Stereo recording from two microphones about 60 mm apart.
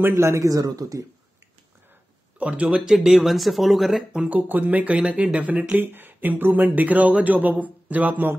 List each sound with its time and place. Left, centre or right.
0.0 s speech: right
0.3 s speech: right
2.3 s speech: right
2.7 s speech: centre
4.2 s speech: right